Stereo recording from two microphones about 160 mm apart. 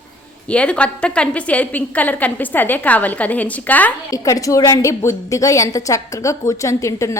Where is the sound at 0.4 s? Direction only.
5° left (ahead or behind).